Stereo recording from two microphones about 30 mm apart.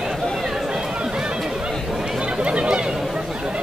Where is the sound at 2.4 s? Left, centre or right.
Right.